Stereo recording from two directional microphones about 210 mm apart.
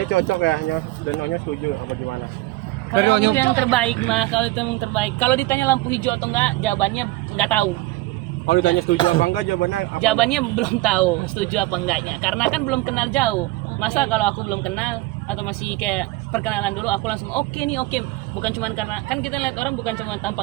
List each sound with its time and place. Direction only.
0.1 s speech: 60° left (ahead or behind)
2.9 s speech: 55° right (ahead or behind)
3.3 s speech: 5° left (ahead or behind)
8.4 s speech: 55° left (ahead or behind)
9.0 s speech: 25° left (ahead or behind)
9.2 s speech: 55° left (ahead or behind)
10.0 s speech: centre (ahead or behind)
18.4 s speech: 5° left (ahead or behind)